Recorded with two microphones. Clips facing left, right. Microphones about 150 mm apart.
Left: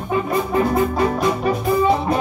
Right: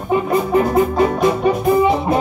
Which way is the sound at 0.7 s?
20° right (ahead or behind).